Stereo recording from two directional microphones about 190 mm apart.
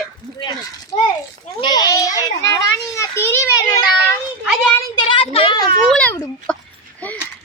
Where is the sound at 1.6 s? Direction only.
20° left (ahead or behind).